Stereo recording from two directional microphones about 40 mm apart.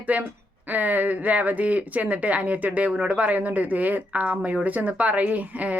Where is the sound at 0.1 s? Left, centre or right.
Right.